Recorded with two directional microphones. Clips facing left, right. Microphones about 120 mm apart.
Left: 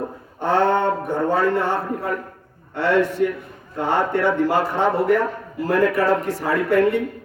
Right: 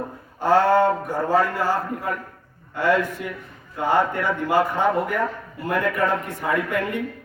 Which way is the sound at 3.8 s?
30° left (ahead or behind).